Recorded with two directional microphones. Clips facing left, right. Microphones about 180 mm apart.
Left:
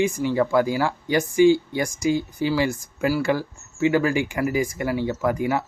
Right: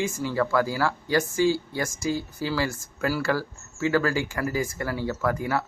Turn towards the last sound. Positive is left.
turn(degrees=15)  # may be behind; listen again after turning